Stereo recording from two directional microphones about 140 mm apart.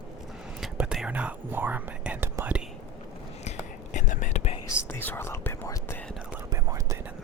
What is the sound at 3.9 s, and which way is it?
Whispering, 65° left (ahead or behind).